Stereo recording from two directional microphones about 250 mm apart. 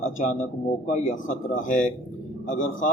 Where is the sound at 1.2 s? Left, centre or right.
Left.